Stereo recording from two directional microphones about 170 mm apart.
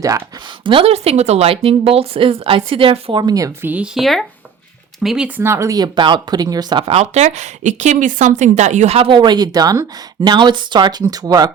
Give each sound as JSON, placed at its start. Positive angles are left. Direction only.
{"t": 0.6, "sound": "speech", "side_deg": -30}